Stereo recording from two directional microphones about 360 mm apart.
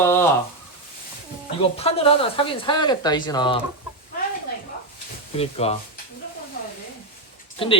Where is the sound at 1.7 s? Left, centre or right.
Centre.